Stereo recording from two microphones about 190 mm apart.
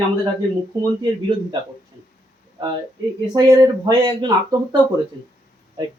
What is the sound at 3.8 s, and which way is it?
Speech, 20° right (ahead or behind).